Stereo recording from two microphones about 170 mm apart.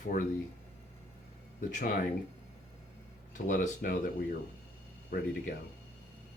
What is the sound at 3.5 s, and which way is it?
Speech, 55° left (ahead or behind).